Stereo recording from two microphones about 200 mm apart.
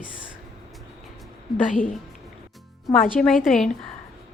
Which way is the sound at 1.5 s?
Centre (ahead or behind).